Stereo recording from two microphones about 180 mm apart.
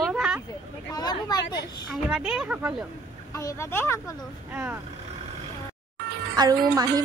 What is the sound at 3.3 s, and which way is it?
Speech, 15° left (ahead or behind).